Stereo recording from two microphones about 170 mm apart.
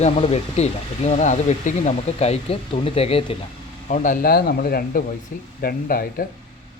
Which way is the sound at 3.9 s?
50° left (ahead or behind).